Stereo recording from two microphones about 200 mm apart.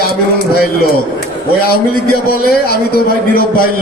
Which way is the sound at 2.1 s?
50° left (ahead or behind).